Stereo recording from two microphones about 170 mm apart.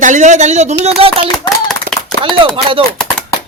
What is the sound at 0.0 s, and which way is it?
A man's voice, 45° right (ahead or behind).